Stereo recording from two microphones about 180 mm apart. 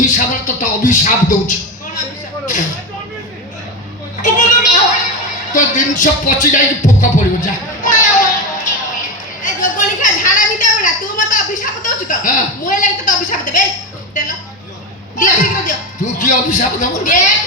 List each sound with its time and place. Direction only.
0.0 s speech: 45° left (ahead or behind)
4.2 s a sound: 45° left (ahead or behind)
14.1 s music: 45° left (ahead or behind)
15.2 s speech: 45° left (ahead or behind)